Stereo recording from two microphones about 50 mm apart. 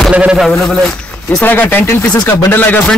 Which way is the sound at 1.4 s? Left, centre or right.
Left.